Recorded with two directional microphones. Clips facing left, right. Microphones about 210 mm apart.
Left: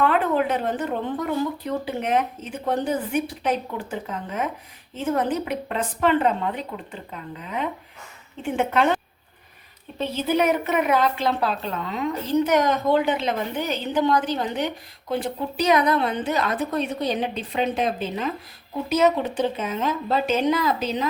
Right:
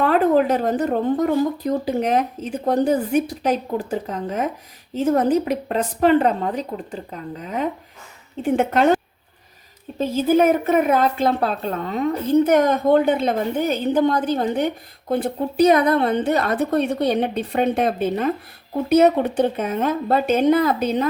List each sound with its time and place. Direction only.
0.0 s speech: 40° right (ahead or behind)
10.0 s a woman's voice: 45° right (ahead or behind)